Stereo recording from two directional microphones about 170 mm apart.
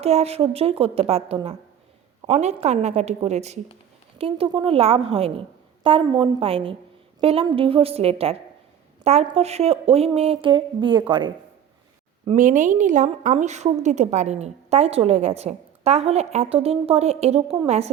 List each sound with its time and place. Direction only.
0.0 s a woman's voice: 35° right (ahead or behind)
12.4 s a woman's voice: 50° right (ahead or behind)